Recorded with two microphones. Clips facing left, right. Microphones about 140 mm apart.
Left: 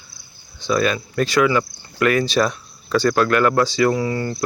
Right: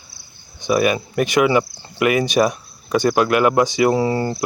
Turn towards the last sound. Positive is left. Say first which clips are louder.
# right 3 dB
turn(degrees=-30)  # may be behind; listen again after turning